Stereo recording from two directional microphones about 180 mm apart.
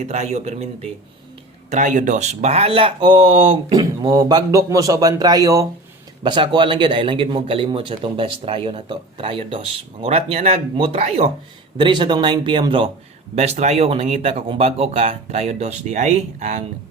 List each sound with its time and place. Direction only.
0.0 s speech: 40° right (ahead or behind)